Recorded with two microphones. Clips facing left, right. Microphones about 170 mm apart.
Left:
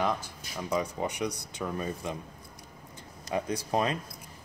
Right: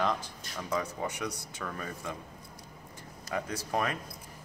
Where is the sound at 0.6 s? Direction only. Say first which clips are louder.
Left 3 dB; 15° left (ahead or behind).